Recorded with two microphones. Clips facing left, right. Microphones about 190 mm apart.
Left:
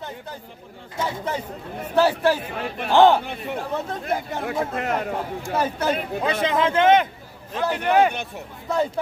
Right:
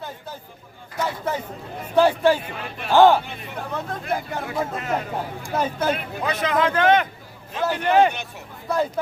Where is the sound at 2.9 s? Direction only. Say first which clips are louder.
Right 1 dB; 20° left (ahead or behind).